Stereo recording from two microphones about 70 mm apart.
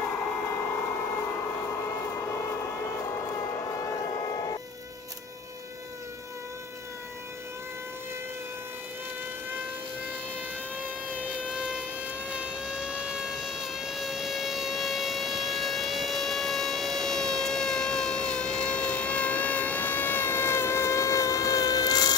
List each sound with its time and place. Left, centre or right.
0.5 s vehicle: left
3.5 s vehicle: left
11.3 s a sound: centre; by 22.1 s left